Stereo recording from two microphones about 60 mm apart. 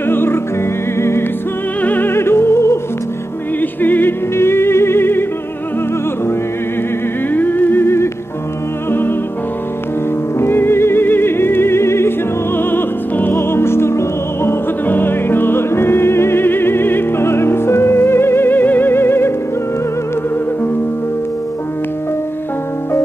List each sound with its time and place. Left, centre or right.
0.0 s music: left
1.8 s music: left
2.1 s music: left
3.8 s music: left
4.4 s music: left
7.3 s music: left
10.4 s music: left
12.5 s music: left
14.9 s music: left